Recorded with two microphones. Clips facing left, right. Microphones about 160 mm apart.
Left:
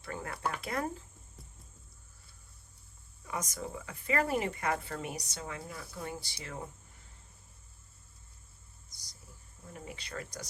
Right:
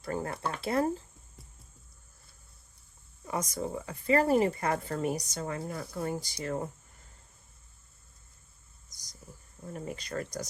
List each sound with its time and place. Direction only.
0.0 s speech: 35° right (ahead or behind)
3.2 s speech: 30° right (ahead or behind)
9.7 s speech: 45° right (ahead or behind)